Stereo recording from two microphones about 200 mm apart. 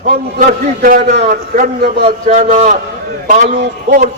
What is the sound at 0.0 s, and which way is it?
A man's voice, 40° right (ahead or behind).